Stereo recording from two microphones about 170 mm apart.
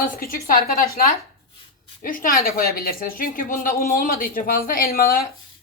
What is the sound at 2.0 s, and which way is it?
Speech, 55° left (ahead or behind).